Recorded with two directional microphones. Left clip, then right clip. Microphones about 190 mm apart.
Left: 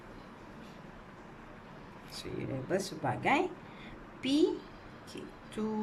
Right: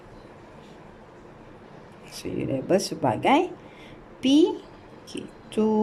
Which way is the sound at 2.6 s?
35° right (ahead or behind).